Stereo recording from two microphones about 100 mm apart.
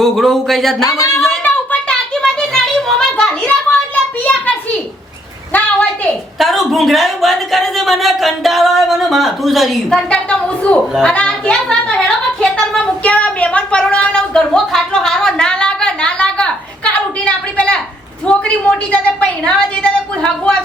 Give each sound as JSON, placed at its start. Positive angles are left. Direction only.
{"t": 0.0, "sound": "speech", "side_deg": 0}
{"t": 0.9, "sound": "a woman's voice", "side_deg": 35}
{"t": 1.5, "sound": "a sound", "side_deg": 10}
{"t": 6.4, "sound": "a woman's voice", "side_deg": 0}